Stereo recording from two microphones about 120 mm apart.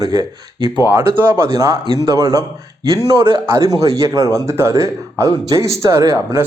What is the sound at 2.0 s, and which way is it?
Speech, 25° right (ahead or behind).